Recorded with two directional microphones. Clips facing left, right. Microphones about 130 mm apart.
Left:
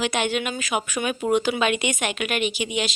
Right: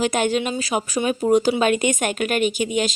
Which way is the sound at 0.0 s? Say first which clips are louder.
Right 4 dB; 40° right (ahead or behind).